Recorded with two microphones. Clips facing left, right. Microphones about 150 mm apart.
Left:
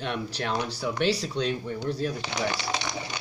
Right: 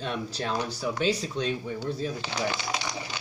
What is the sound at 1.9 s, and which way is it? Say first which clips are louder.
Speech: left 3 dB; 70° left (ahead or behind).